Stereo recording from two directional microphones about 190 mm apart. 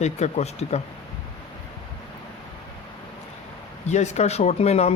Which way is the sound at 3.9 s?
35° left (ahead or behind).